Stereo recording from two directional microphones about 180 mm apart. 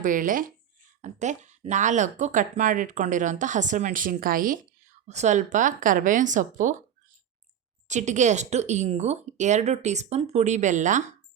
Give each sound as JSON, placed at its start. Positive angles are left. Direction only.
{"t": 0.0, "sound": "speech", "side_deg": -50}
{"t": 7.9, "sound": "speech", "side_deg": -40}